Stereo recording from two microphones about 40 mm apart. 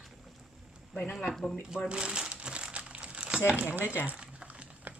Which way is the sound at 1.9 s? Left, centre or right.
Right.